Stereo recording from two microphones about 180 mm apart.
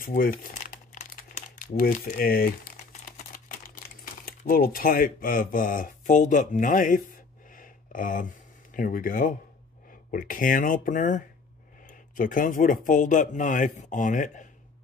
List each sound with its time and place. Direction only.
0.0 s crumpling: 55° left (ahead or behind)
3.4 s speech: 50° left (ahead or behind)
7.4 s a sound: 50° left (ahead or behind)
10.1 s speech: 50° left (ahead or behind)